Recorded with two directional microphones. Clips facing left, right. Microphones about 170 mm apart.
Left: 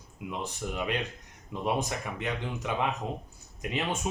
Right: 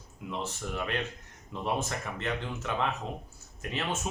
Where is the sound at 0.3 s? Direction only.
15° left (ahead or behind).